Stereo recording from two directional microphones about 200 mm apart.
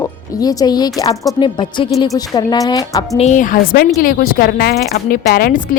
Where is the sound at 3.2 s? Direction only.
35° left (ahead or behind).